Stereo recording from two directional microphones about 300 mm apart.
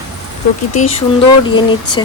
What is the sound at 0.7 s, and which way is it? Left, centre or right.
Speech, centre.